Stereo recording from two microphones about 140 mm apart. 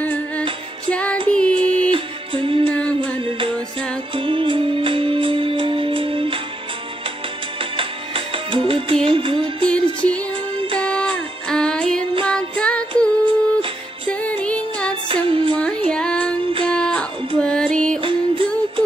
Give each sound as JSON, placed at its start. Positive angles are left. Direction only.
{"t": 0.0, "sound": "music", "side_deg": 10}
{"t": 1.9, "sound": "music", "side_deg": -40}
{"t": 2.7, "sound": "music", "side_deg": 10}
{"t": 3.0, "sound": "music", "side_deg": -40}
{"t": 7.7, "sound": "music", "side_deg": -40}
{"t": 10.8, "sound": "music", "side_deg": 10}
{"t": 15.0, "sound": "music", "side_deg": -40}
{"t": 15.6, "sound": "music", "side_deg": 10}
{"t": 18.0, "sound": "music", "side_deg": -40}